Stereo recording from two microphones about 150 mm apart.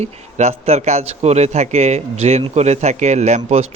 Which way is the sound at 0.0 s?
50° right (ahead or behind).